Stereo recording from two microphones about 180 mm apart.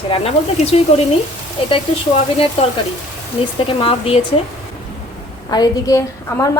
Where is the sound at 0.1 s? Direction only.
35° left (ahead or behind).